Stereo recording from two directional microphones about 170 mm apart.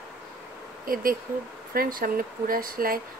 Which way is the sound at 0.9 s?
60° right (ahead or behind).